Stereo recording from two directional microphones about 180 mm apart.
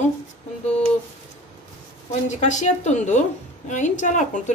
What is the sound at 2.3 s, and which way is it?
A woman's voice, 40° left (ahead or behind).